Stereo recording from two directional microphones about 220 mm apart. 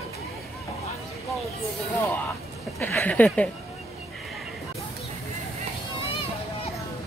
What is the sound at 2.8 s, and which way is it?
Speech, 10° left (ahead or behind).